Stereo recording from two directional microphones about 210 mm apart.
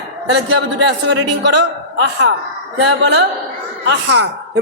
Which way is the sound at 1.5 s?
55° right (ahead or behind).